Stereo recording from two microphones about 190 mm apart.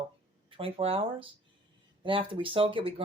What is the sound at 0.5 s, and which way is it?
Speech, 30° right (ahead or behind).